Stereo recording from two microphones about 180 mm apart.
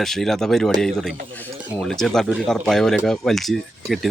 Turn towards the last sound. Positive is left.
turn(degrees=0)  # may be behind; listen again after turning